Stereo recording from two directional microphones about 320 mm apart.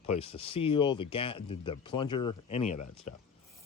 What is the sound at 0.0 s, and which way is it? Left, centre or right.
Speech, centre.